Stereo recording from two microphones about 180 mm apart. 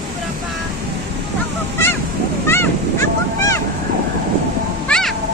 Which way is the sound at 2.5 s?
15° left (ahead or behind).